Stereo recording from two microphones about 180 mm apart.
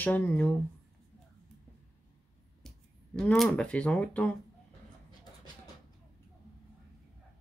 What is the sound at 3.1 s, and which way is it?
Speech, 5° left (ahead or behind).